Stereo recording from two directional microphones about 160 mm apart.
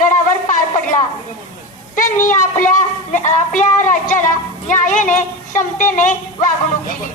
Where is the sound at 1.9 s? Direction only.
55° left (ahead or behind).